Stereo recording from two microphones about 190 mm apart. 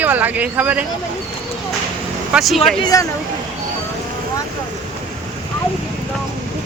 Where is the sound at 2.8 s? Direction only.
20° left (ahead or behind).